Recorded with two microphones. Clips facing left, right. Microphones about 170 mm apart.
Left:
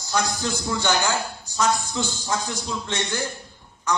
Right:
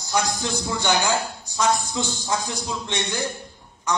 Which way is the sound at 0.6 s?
15° right (ahead or behind).